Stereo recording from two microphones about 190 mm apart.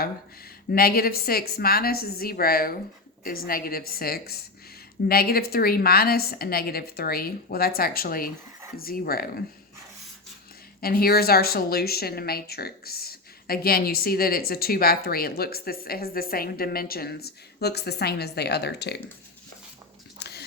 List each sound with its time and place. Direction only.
0.7 s speech: 50° left (ahead or behind)
10.8 s speech: 50° left (ahead or behind)
20.1 s a sound: 60° left (ahead or behind)